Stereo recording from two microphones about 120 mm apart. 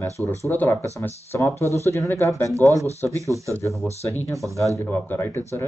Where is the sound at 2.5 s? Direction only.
25° right (ahead or behind).